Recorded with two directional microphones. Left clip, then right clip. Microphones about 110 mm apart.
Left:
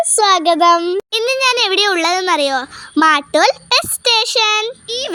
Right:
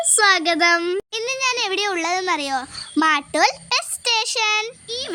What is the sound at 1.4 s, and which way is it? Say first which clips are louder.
A child's voice: left 7 dB; 40° left (ahead or behind).